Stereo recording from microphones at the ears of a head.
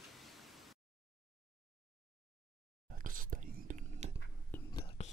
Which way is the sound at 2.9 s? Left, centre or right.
Right.